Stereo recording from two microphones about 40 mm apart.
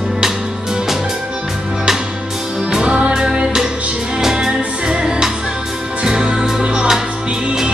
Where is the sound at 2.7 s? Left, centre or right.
Right.